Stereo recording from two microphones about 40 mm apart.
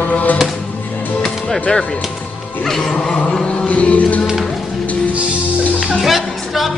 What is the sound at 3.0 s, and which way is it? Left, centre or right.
Chant, left.